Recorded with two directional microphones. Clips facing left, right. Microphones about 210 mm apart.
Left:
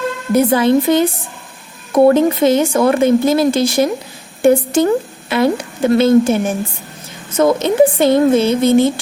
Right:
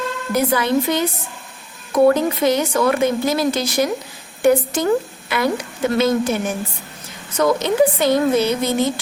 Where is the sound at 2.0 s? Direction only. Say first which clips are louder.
Left 5 dB; 25° left (ahead or behind).